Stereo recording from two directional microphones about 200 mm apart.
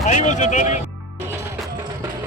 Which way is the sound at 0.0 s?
35° left (ahead or behind).